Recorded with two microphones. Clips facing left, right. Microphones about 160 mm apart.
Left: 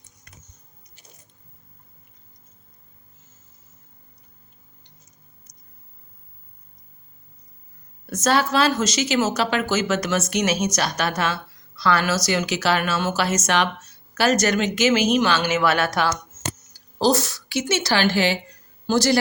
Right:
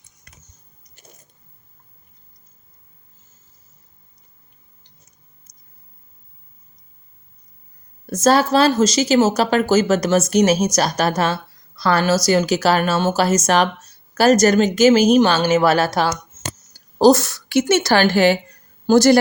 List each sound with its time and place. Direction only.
0.9 s biting: 40° right (ahead or behind)
5.5 s a sound: 10° right (ahead or behind)
8.1 s speech: 35° right (ahead or behind)
16.7 s a woman's voice: 50° right (ahead or behind)